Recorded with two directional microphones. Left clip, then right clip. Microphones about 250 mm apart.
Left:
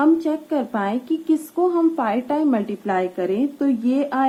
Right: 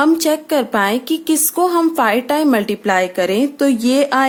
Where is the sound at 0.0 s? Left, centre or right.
Right.